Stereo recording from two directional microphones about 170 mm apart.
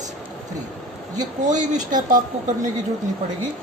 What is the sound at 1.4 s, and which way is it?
Speech, 50° right (ahead or behind).